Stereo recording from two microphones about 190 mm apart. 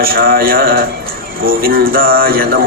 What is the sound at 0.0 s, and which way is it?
Speech, 50° right (ahead or behind).